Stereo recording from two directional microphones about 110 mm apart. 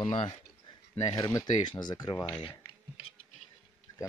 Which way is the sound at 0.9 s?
30° left (ahead or behind).